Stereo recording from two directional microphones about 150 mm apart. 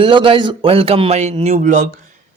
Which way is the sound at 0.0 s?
35° right (ahead or behind).